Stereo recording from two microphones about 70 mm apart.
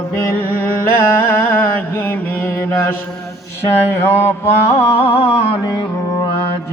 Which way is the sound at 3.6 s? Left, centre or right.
Left.